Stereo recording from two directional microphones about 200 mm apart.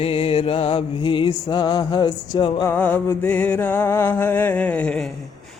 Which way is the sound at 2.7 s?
10° left (ahead or behind).